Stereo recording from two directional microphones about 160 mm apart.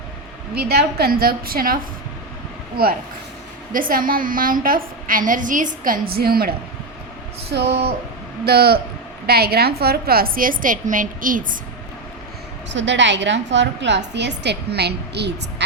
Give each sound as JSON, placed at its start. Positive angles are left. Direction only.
{"t": 0.5, "sound": "a woman's voice", "side_deg": -80}
{"t": 7.5, "sound": "a woman's voice", "side_deg": -90}
{"t": 8.4, "sound": "a man's voice", "side_deg": -80}
{"t": 12.6, "sound": "a woman's voice", "side_deg": -90}